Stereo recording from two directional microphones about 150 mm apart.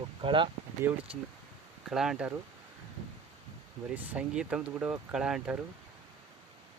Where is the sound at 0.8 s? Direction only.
15° right (ahead or behind).